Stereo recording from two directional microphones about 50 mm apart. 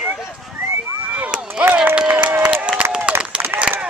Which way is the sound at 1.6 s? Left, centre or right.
Right.